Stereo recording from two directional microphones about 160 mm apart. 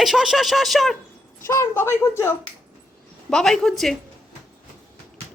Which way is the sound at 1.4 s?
20° left (ahead or behind).